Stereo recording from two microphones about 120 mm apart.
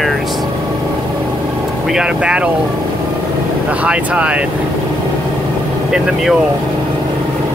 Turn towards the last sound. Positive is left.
turn(degrees=-5)  # may be behind; listen again after turning